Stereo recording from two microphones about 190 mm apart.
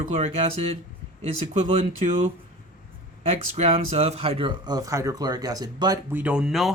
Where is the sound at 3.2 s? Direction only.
35° right (ahead or behind).